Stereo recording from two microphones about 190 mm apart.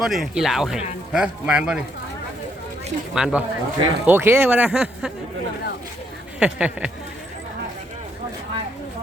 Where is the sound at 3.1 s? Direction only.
5° right (ahead or behind).